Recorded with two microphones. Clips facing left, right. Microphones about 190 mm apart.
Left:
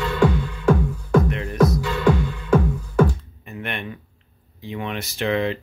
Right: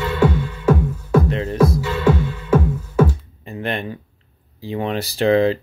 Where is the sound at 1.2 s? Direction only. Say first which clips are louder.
Right 2 dB; 30° right (ahead or behind).